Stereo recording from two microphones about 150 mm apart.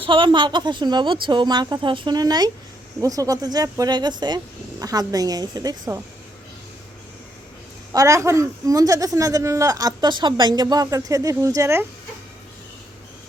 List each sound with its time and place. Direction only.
0.0 s speech: 35° right (ahead or behind)
7.9 s speech: 20° right (ahead or behind)